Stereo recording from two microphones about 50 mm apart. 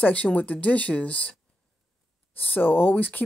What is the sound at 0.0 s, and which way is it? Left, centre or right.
Speech, left.